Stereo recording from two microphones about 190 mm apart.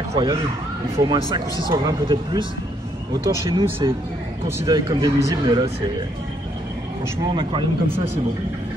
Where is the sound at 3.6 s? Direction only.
25° right (ahead or behind).